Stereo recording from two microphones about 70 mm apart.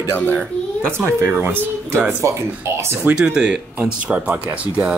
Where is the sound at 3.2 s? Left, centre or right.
Centre.